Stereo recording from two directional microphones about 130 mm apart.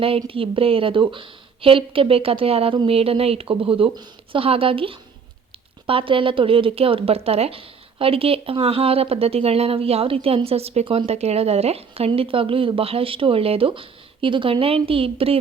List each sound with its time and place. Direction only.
0.3 s a woman's voice: 45° right (ahead or behind)